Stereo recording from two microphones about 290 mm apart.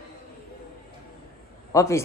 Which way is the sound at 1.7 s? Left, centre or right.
Centre.